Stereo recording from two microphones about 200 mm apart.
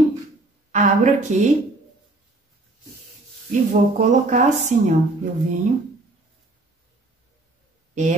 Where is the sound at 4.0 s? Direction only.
40° right (ahead or behind).